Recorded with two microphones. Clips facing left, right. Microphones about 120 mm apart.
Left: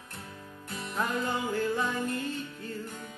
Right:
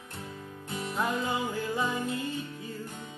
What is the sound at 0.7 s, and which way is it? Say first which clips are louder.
Music: right 1 dB; 15° right (ahead or behind).